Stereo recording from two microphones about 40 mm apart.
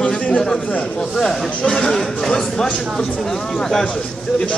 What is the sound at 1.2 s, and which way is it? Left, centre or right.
Speech, centre.